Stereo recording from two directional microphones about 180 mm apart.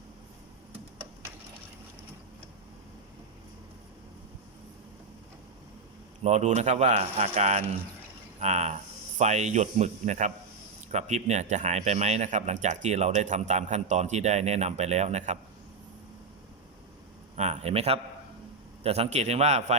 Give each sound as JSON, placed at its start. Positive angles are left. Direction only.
{"t": 6.2, "sound": "speech", "side_deg": -40}
{"t": 17.3, "sound": "speech", "side_deg": -40}